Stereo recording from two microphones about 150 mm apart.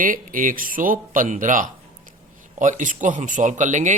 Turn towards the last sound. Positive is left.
turn(degrees=-55)  # may be behind; listen again after turning